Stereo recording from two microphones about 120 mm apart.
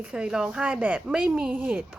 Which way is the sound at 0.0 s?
10° right (ahead or behind).